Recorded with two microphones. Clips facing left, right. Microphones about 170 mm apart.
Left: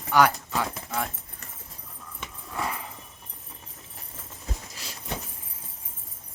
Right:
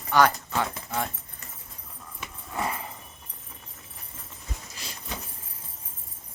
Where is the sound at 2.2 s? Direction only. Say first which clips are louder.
Right 1 dB; centre (ahead or behind).